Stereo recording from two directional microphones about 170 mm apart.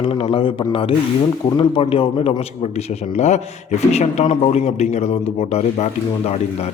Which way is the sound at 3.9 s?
40° left (ahead or behind).